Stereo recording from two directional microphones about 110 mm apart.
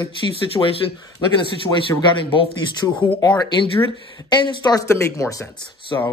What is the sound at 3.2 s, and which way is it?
Speech, 40° left (ahead or behind).